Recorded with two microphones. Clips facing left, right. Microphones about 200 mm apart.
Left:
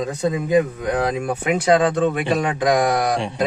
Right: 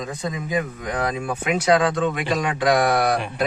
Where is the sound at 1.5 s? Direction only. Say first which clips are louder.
Left 2 dB; 35° left (ahead or behind).